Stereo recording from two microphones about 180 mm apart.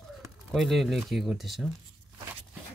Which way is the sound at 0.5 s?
Centre (ahead or behind).